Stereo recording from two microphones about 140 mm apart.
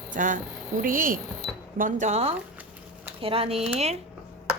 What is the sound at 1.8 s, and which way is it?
Speech, 60° right (ahead or behind).